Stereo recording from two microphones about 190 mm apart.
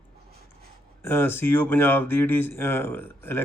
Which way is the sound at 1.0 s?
10° left (ahead or behind).